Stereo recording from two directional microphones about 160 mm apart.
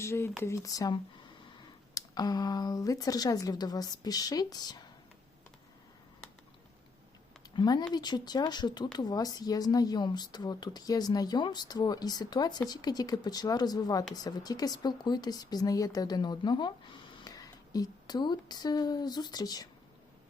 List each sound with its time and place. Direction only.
0.0 s speech: 15° left (ahead or behind)
7.5 s speech: 25° left (ahead or behind)